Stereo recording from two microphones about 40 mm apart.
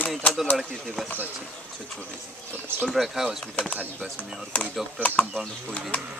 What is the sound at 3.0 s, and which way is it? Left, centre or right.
Speech, centre.